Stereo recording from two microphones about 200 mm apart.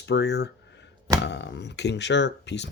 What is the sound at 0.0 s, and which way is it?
Speech, 60° left (ahead or behind).